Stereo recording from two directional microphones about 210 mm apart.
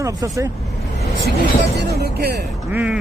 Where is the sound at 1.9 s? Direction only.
50° right (ahead or behind).